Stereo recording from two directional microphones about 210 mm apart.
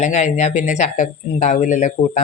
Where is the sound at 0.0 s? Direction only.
35° left (ahead or behind).